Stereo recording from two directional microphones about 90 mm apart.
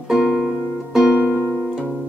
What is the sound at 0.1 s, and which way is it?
Music, 5° right (ahead or behind).